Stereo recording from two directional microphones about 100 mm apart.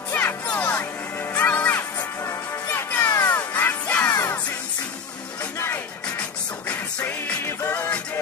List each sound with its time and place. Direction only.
0.1 s music: 20° left (ahead or behind)
4.1 s music: 30° left (ahead or behind)
5.6 s music: 25° left (ahead or behind)